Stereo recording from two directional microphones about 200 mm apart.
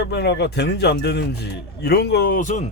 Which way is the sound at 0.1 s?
60° left (ahead or behind).